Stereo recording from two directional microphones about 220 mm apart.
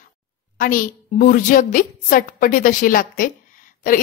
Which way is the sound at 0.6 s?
40° left (ahead or behind).